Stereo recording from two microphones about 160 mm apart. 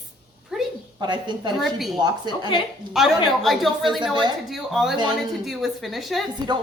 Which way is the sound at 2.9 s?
Centre (ahead or behind).